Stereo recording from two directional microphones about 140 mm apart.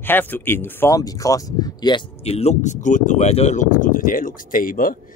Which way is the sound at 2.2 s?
45° left (ahead or behind).